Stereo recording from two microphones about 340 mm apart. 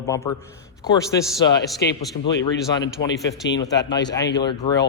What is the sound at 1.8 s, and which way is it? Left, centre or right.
Speech, left.